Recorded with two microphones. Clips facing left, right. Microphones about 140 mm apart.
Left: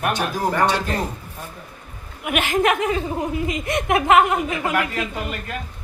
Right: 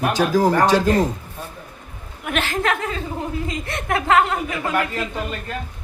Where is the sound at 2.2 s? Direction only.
10° left (ahead or behind).